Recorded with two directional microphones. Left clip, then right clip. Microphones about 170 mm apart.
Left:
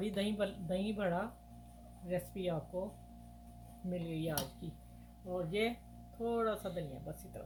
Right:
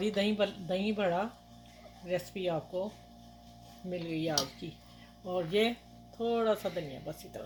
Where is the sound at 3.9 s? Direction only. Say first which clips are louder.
Right 5 dB; 30° right (ahead or behind).